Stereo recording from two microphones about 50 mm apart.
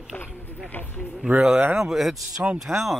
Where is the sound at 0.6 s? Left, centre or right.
Left.